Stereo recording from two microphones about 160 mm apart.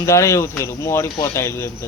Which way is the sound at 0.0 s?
20° left (ahead or behind).